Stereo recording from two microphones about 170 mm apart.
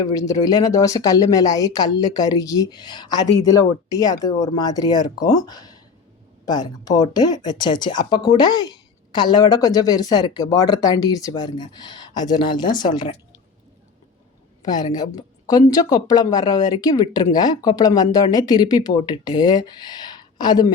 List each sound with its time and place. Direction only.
0.0 s speech: 20° left (ahead or behind)
14.6 s speech: 25° left (ahead or behind)